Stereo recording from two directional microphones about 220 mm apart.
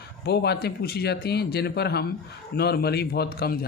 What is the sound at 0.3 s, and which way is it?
Speech, 45° left (ahead or behind).